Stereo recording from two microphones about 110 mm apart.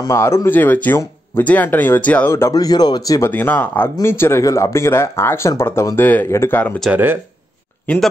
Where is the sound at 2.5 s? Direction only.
35° left (ahead or behind).